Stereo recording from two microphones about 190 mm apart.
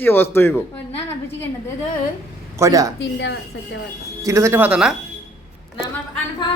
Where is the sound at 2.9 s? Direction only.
70° left (ahead or behind).